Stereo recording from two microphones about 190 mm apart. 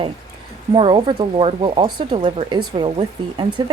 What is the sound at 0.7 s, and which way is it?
Speech, 25° right (ahead or behind).